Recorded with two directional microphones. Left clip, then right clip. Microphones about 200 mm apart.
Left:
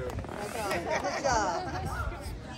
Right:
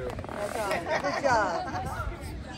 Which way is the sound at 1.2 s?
35° right (ahead or behind).